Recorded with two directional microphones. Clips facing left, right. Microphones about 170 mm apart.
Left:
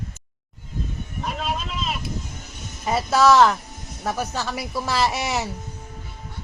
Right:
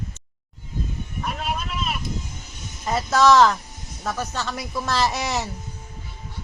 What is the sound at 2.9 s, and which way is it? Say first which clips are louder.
Speech: even; 10° left (ahead or behind).